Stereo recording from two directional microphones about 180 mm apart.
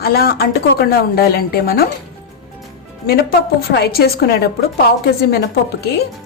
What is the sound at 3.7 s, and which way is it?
Speech, 65° left (ahead or behind).